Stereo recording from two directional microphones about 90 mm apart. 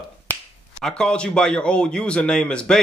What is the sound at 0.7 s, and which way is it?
A man's voice, 5° left (ahead or behind).